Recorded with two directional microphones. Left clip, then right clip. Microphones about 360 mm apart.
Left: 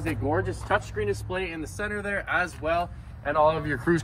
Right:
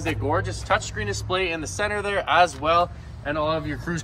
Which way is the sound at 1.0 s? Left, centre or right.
Right.